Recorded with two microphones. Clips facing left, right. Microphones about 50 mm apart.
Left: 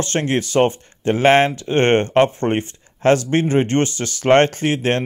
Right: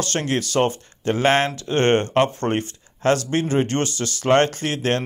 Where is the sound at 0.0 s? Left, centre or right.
Left.